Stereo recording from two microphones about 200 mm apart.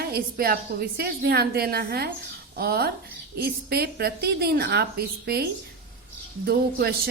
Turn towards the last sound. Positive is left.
turn(degrees=-50)  # may be behind; listen again after turning